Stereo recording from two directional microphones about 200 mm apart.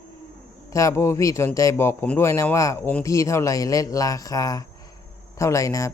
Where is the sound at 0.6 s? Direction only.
15° left (ahead or behind).